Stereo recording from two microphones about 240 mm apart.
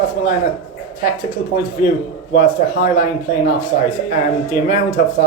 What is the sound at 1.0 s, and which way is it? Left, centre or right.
Speech, left.